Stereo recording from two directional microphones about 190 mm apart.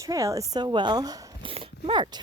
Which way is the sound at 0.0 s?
15° right (ahead or behind).